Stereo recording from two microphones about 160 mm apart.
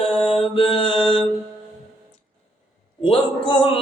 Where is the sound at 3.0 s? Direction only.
35° left (ahead or behind).